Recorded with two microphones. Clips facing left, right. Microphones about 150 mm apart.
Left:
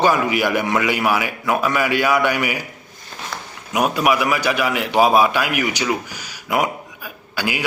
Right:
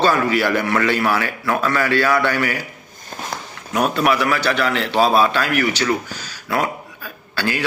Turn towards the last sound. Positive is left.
turn(degrees=15)  # may be behind; listen again after turning